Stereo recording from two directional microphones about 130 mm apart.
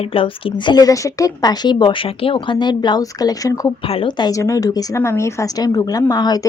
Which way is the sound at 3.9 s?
40° left (ahead or behind).